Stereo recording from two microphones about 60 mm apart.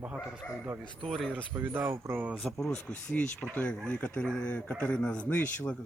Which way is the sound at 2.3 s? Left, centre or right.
Centre.